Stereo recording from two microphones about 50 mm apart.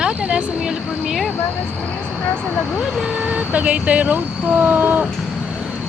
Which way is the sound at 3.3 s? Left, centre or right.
Right.